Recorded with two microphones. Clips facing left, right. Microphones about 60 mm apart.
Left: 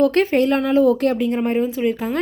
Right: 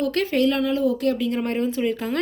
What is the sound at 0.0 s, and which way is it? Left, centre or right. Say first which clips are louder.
Speech: left 5 dB; left.